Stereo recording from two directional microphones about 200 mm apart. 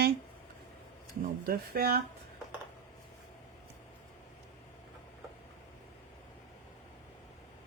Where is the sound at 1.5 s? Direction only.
50° right (ahead or behind).